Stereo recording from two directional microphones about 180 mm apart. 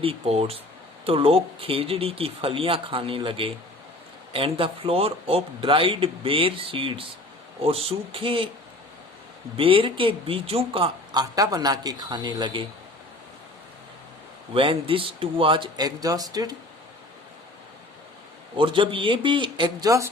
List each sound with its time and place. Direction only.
0.0 s speech: 30° right (ahead or behind)
9.6 s speech: 30° right (ahead or behind)
14.5 s speech: 30° right (ahead or behind)
18.5 s speech: 30° right (ahead or behind)